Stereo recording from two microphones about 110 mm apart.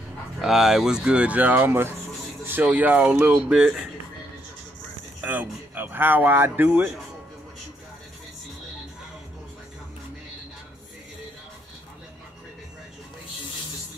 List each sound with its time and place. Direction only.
0.4 s speech: 5° right (ahead or behind)
5.2 s speech: 15° right (ahead or behind)